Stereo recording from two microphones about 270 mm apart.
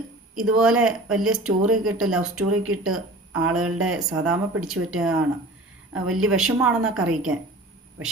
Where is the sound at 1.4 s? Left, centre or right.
Right.